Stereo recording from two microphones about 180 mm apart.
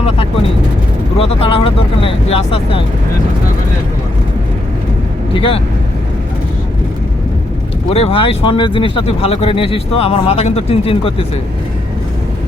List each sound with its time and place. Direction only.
1.2 s speech: 30° left (ahead or behind)
5.3 s speech: 30° left (ahead or behind)
7.9 s speech: 30° left (ahead or behind)